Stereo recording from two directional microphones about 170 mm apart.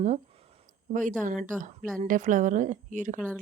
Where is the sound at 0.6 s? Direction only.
50° right (ahead or behind).